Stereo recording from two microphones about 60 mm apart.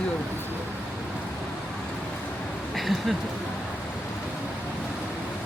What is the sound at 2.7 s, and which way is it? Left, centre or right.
Speech, centre.